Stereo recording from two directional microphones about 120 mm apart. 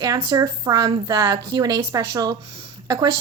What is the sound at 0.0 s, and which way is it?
A woman's voice, 30° right (ahead or behind).